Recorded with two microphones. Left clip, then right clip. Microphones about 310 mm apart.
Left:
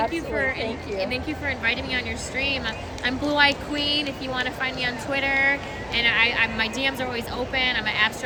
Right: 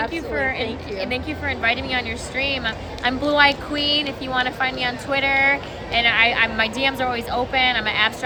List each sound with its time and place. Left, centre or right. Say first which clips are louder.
0.1 s a woman's voice: right 2 dB; centre